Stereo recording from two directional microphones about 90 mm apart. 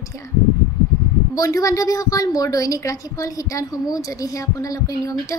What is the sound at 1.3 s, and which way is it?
A woman's voice, 40° left (ahead or behind).